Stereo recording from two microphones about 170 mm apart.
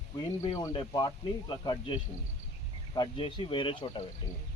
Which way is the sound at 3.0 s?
30° left (ahead or behind).